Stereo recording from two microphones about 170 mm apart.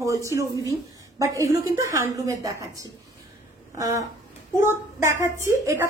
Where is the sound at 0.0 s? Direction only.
20° right (ahead or behind).